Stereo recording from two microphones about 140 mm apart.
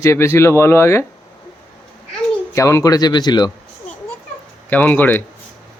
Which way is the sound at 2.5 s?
20° left (ahead or behind).